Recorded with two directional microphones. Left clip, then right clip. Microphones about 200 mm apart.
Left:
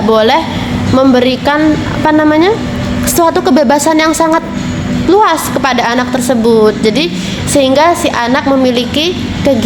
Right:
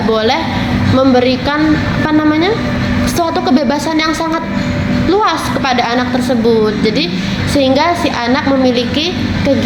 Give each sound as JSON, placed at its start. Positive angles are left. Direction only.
{"t": 0.1, "sound": "a woman's voice", "side_deg": 60}